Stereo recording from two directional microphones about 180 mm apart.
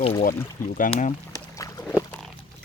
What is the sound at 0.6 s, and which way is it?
Speech, 50° left (ahead or behind).